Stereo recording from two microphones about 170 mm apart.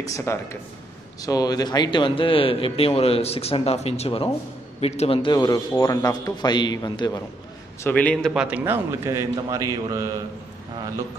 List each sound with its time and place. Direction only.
0.0 s a man's voice: 15° left (ahead or behind)
7.8 s speech: 10° left (ahead or behind)
8.3 s a man's voice: 5° right (ahead or behind)